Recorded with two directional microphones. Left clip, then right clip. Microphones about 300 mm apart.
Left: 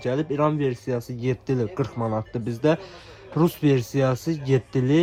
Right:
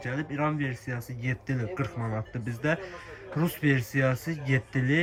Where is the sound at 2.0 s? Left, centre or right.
Right.